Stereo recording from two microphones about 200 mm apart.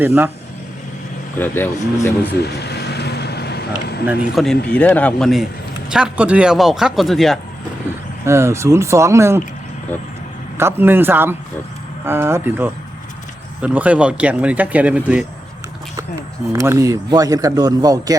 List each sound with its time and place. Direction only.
0.0 s speech: 10° right (ahead or behind)
1.4 s speech: 10° left (ahead or behind)
2.3 s vehicle: 55° left (ahead or behind)
4.0 s speech: 5° right (ahead or behind)
4.7 s a man's voice: 5° left (ahead or behind)
8.2 s speech: 15° right (ahead or behind)
10.6 s speech: 10° right (ahead or behind)
16.5 s speech: 15° right (ahead or behind)